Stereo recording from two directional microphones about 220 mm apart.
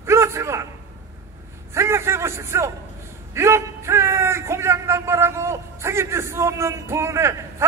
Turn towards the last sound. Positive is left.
turn(degrees=-10)  # may be behind; listen again after turning